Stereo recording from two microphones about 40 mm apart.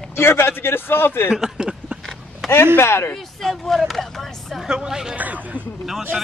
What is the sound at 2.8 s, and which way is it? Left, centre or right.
Speech, left.